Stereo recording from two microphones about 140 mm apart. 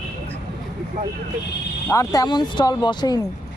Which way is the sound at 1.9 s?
25° left (ahead or behind).